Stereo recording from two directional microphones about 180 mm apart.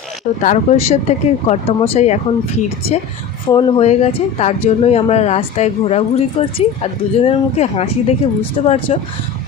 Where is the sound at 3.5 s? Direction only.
35° left (ahead or behind).